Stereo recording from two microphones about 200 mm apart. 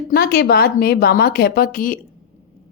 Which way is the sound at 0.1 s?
50° left (ahead or behind).